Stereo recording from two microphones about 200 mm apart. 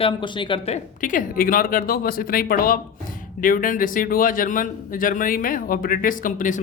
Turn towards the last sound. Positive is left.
turn(degrees=40)  # may be behind; listen again after turning